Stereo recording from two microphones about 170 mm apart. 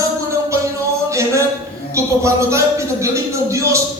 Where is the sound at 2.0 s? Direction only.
15° right (ahead or behind).